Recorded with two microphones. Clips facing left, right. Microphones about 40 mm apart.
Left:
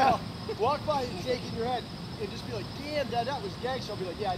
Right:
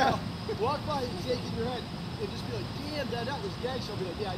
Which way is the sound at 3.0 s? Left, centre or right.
Centre.